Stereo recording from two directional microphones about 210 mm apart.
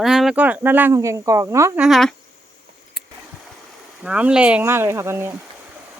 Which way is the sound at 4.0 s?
5° right (ahead or behind).